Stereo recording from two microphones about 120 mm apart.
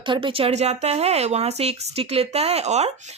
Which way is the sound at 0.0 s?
45° right (ahead or behind).